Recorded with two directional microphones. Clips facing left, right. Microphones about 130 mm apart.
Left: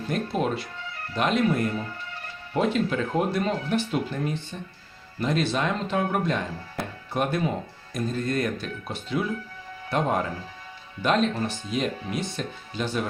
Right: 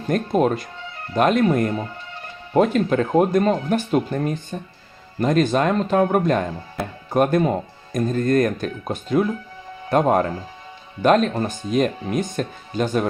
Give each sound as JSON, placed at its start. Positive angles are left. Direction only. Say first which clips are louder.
{"t": 0.1, "sound": "speech", "louder": "right 8 dB", "side_deg": -45}